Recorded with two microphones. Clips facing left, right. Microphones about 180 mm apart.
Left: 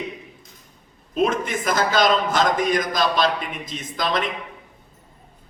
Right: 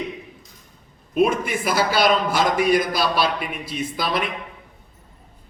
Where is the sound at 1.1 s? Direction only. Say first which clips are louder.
Right 2 dB; 10° right (ahead or behind).